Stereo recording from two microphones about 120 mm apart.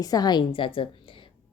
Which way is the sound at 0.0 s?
30° left (ahead or behind).